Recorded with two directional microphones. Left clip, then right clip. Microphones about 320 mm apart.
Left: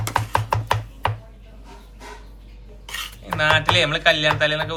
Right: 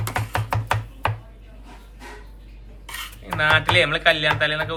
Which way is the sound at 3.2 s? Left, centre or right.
Centre.